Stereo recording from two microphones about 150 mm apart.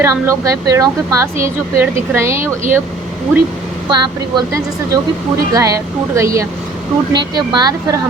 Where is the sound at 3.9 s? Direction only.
30° right (ahead or behind).